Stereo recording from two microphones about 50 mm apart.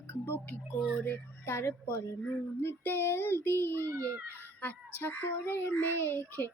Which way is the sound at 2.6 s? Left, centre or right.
Left.